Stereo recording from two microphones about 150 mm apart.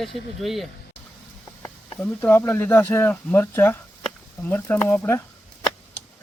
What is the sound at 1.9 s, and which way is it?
Speech, 10° left (ahead or behind).